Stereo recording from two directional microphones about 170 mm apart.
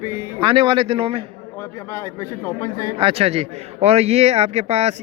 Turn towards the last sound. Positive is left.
turn(degrees=-40)  # may be behind; listen again after turning